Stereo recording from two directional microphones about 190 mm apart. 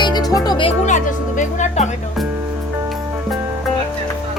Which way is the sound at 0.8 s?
40° left (ahead or behind).